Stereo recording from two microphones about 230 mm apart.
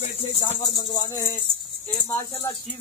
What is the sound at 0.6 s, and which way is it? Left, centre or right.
Speech, centre.